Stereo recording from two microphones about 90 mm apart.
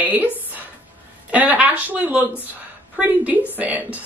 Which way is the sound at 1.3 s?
20° right (ahead or behind).